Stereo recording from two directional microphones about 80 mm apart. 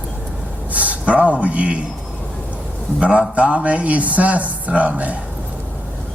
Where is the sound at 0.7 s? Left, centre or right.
Centre.